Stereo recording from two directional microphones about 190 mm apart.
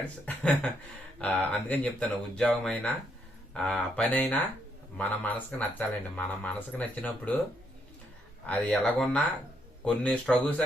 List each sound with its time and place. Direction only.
0.3 s speech: 5° left (ahead or behind)
8.4 s speech: 5° left (ahead or behind)